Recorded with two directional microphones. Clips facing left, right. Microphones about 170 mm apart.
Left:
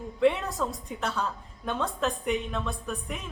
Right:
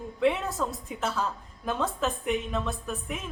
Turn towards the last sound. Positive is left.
turn(degrees=0)  # may be behind; listen again after turning